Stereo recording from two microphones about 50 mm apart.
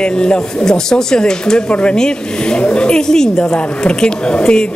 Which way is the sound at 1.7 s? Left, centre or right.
Left.